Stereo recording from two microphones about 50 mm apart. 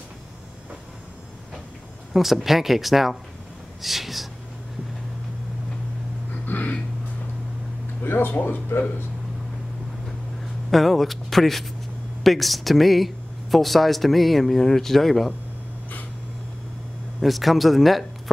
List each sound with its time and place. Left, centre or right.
2.1 s speech: centre
6.4 s a sound: left
8.0 s speech: left
10.7 s speech: centre
17.2 s speech: centre